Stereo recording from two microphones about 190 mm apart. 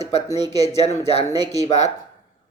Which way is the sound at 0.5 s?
35° left (ahead or behind).